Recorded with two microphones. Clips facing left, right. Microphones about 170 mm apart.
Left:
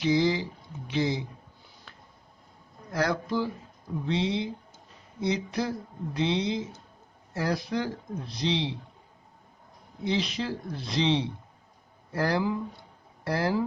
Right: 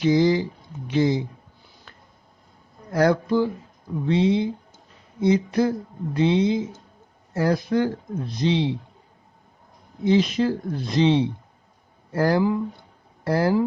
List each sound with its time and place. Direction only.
0.0 s speech: 45° right (ahead or behind)
2.9 s speech: 50° right (ahead or behind)
10.0 s speech: 50° right (ahead or behind)